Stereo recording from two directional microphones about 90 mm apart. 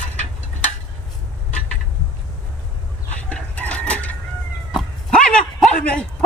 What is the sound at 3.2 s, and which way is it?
Chicken, 15° left (ahead or behind).